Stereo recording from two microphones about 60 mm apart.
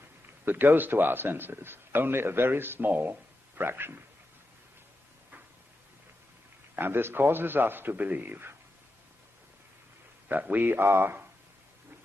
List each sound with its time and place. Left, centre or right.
0.5 s a man's voice: right
6.7 s a man's voice: right
10.2 s a man's voice: right